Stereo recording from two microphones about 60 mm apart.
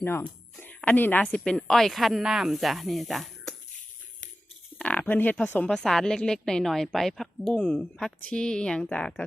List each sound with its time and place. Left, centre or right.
0.0 s a woman's voice: left
0.5 s music: left
0.9 s a woman's voice: left
1.5 s speech: centre
4.8 s insect: left
5.6 s a woman's voice: centre
7.5 s a woman's voice: centre